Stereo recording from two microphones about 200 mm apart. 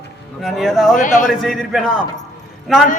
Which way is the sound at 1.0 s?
40° left (ahead or behind).